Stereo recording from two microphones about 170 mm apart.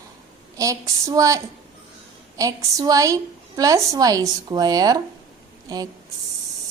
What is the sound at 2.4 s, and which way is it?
A woman's voice, 20° right (ahead or behind).